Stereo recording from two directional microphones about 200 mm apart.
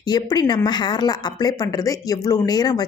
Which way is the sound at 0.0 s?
20° left (ahead or behind).